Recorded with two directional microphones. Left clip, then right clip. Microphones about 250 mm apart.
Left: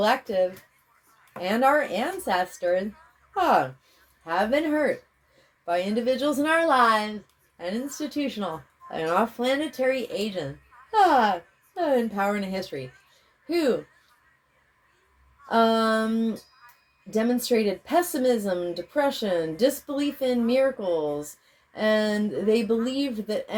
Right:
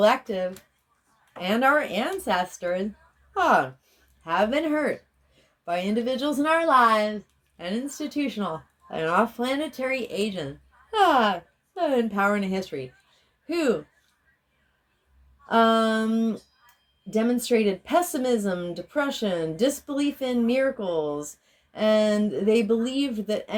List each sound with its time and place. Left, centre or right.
0.0 s speech: right
15.4 s speech: right
17.2 s speech: right